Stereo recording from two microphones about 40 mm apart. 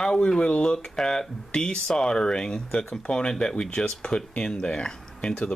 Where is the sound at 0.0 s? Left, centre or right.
Centre.